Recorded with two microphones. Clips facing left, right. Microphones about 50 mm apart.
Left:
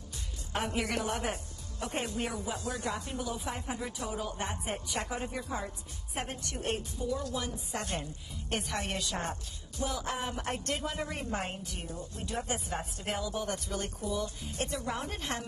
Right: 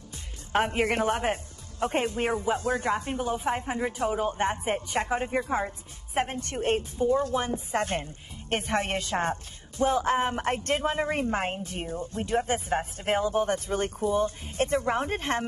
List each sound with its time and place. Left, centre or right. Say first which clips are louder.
0.5 s a woman's voice: right 8 dB; right